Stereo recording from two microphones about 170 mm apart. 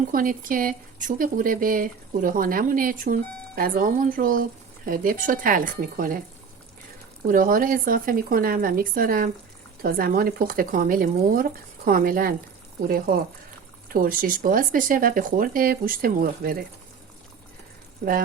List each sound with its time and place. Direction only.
0.1 s speech: 55° right (ahead or behind)
7.3 s speech: 55° right (ahead or behind)